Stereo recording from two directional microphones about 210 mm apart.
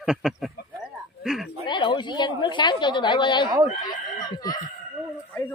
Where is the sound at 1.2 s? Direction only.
Centre (ahead or behind).